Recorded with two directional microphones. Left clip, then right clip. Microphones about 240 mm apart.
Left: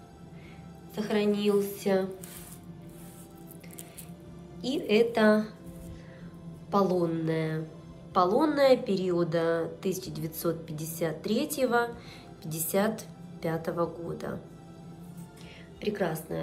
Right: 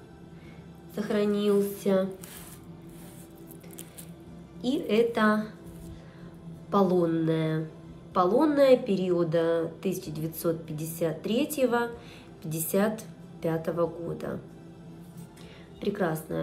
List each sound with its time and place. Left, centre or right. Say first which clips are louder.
0.9 s a woman's voice: right 1 dB; centre
4.6 s a woman's voice: even; centre
6.7 s a woman's voice: right 2 dB; centre
15.8 s a woman's voice: right 1 dB; centre